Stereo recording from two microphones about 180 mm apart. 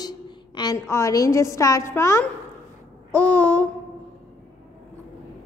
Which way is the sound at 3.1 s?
5° left (ahead or behind).